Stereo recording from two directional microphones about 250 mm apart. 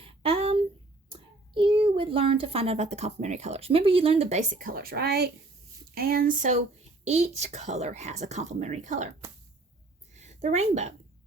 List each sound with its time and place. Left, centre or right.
0.0 s a sound: right
1.1 s a child's voice: right
10.2 s a woman's voice: right